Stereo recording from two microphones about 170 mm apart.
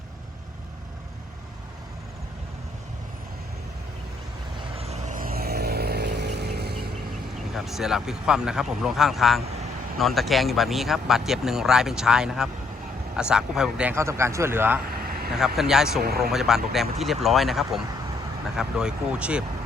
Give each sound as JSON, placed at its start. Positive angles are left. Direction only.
{"t": 4.8, "sound": "vehicle", "side_deg": -40}
{"t": 7.5, "sound": "speech", "side_deg": 0}
{"t": 14.9, "sound": "vehicle", "side_deg": -60}
{"t": 15.3, "sound": "speech", "side_deg": 0}
{"t": 16.0, "sound": "speech", "side_deg": -65}
{"t": 16.3, "sound": "speech", "side_deg": 0}